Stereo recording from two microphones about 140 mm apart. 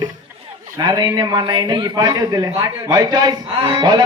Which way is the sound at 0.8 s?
30° right (ahead or behind).